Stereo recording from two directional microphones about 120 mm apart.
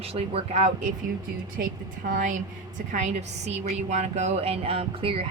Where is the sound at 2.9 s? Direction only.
80° right.